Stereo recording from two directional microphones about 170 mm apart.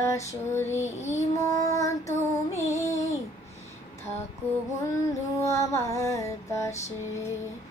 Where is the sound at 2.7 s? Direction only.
20° left (ahead or behind).